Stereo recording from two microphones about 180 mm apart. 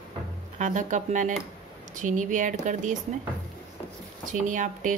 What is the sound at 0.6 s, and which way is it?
Speech, 45° right (ahead or behind).